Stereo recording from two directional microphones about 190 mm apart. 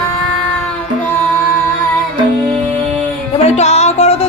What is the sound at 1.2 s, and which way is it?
Music, 10° left (ahead or behind).